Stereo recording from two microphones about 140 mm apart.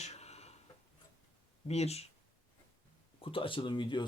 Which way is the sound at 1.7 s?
50° left (ahead or behind).